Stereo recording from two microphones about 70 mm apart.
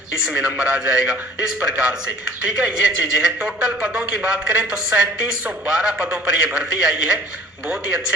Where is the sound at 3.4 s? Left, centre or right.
Centre.